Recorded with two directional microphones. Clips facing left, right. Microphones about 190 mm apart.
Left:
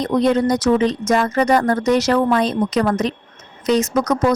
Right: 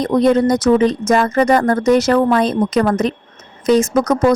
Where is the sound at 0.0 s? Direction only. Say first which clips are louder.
Right 3 dB; 50° right (ahead or behind).